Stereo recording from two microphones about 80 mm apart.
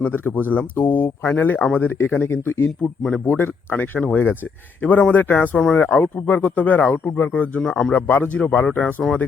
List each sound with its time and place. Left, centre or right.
0.0 s speech: left
5.5 s speech: centre
5.8 s speech: left